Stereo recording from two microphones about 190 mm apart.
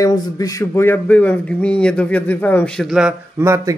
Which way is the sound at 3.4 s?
15° right (ahead or behind).